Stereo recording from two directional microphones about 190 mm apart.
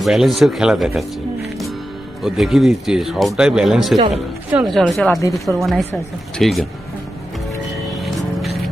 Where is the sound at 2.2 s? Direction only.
Centre (ahead or behind).